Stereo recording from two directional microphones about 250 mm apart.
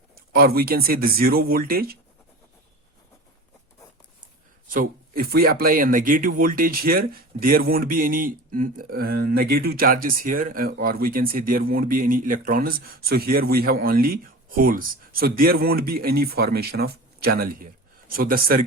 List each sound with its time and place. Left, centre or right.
0.3 s speech: right
4.7 s speech: right